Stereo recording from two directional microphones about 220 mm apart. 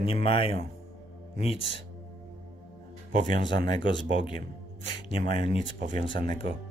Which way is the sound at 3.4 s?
20° left (ahead or behind).